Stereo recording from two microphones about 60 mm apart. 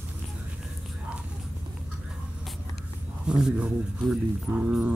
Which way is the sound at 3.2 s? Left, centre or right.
Centre.